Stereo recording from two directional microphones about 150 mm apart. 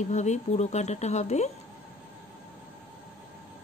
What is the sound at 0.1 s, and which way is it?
Speech, 50° left (ahead or behind).